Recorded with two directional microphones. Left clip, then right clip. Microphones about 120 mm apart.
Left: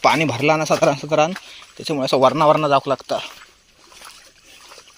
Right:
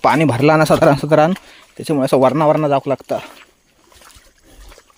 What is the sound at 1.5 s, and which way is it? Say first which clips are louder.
Speech: right 5 dB; 90° right.